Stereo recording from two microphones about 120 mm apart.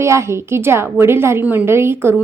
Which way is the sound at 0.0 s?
25° right (ahead or behind).